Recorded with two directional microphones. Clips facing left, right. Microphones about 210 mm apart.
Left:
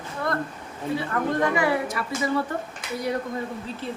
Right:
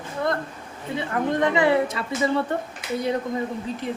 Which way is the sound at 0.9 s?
20° right (ahead or behind).